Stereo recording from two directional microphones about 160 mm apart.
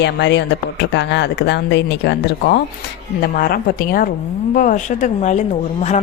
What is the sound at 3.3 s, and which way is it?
A woman's voice, 65° left (ahead or behind).